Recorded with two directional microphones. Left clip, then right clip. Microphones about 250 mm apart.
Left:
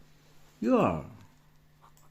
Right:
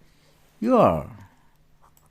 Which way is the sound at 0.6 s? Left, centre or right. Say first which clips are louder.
Right 8 dB; right.